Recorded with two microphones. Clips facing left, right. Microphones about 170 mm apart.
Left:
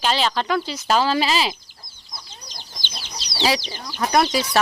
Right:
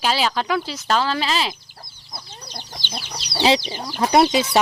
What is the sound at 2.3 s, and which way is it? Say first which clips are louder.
Chicken: right 5 dB; 60° right (ahead or behind).